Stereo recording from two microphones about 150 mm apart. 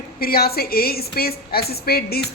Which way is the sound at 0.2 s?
85° left.